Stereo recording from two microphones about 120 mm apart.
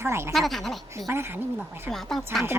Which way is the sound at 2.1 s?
Centre (ahead or behind).